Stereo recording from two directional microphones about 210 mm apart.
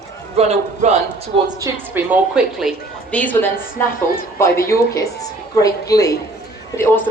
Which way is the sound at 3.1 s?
10° left (ahead or behind).